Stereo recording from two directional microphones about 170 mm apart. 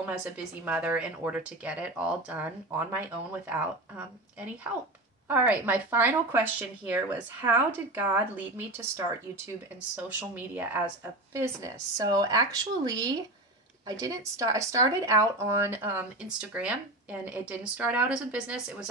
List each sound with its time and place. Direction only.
0.0 s speech: 5° right (ahead or behind)